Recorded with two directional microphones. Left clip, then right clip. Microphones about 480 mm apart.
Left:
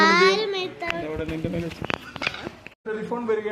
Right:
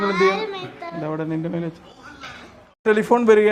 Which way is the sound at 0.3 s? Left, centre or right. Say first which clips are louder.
Left 2 dB; centre.